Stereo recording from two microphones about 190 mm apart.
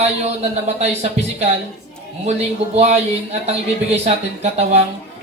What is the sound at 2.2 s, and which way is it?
Speech, 35° right (ahead or behind).